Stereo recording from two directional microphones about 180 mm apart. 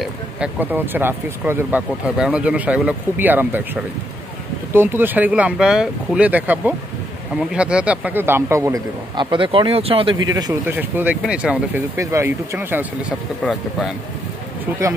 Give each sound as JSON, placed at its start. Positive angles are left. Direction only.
{"t": 0.0, "sound": "speech", "side_deg": -10}
{"t": 4.7, "sound": "speech", "side_deg": -10}
{"t": 10.2, "sound": "speech", "side_deg": -20}
{"t": 13.4, "sound": "speech", "side_deg": 0}